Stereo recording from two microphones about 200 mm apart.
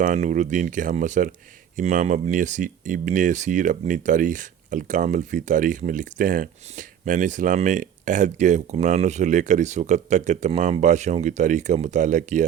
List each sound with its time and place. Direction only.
0.0 s speech: 40° right (ahead or behind)